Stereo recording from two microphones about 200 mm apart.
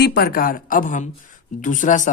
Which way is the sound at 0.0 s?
50° left (ahead or behind).